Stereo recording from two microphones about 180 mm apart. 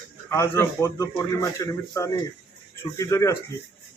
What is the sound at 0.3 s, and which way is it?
A man's voice, 15° left (ahead or behind).